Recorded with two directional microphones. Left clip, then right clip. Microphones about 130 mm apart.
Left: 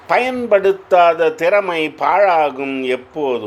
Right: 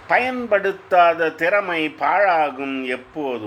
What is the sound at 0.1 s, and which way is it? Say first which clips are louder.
A man's voice: left 4 dB; 35° left (ahead or behind).